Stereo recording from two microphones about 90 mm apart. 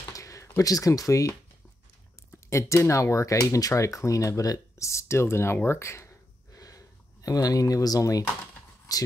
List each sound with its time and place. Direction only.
0.1 s typing: 35° left (ahead or behind)
2.5 s speech: 35° left (ahead or behind)
5.7 s a sound: 30° left (ahead or behind)
8.9 s speech: 40° left (ahead or behind)